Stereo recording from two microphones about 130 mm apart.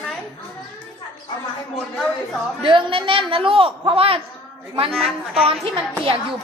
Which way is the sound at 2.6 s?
40° right (ahead or behind).